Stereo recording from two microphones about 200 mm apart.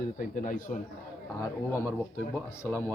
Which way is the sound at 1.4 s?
15° left (ahead or behind).